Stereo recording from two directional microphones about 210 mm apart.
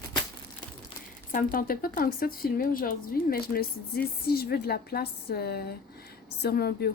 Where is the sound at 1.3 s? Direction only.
40° left (ahead or behind).